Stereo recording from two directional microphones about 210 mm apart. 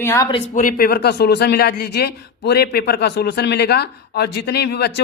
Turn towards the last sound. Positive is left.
turn(degrees=50)  # may be behind; listen again after turning